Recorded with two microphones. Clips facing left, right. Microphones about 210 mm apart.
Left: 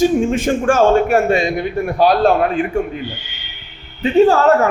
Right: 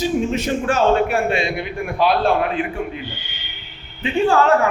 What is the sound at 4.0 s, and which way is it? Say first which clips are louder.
Speech: left 5 dB; 40° left (ahead or behind).